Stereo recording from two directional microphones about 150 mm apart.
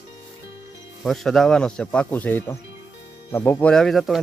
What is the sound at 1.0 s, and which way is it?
Speech, centre (ahead or behind).